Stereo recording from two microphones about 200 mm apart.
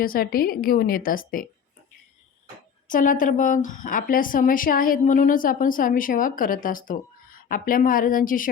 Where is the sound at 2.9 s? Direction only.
40° left (ahead or behind).